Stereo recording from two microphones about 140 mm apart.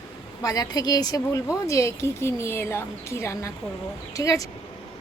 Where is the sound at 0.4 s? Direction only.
25° left (ahead or behind).